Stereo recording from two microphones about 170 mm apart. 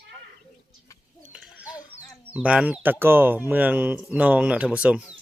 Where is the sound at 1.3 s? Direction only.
5° right (ahead or behind).